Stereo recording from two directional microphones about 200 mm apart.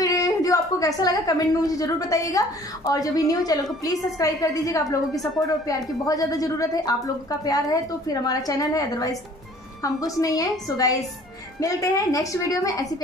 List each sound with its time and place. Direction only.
0.0 s a woman's voice: 15° left (ahead or behind)
11.6 s a woman's voice: 15° left (ahead or behind)